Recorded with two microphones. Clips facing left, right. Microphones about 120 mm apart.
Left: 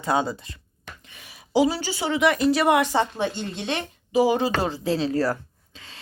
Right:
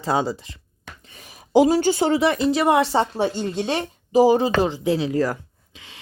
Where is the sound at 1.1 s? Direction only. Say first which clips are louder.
Right 5 dB; 40° right (ahead or behind).